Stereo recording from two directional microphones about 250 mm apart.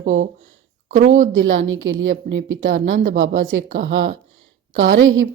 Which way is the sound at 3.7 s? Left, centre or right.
Right.